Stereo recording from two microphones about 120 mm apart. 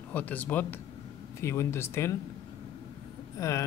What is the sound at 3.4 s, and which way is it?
Speech, 25° left (ahead or behind).